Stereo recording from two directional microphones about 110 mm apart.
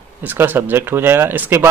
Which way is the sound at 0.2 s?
15° right (ahead or behind).